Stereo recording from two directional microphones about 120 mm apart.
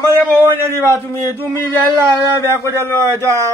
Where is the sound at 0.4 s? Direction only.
25° right (ahead or behind).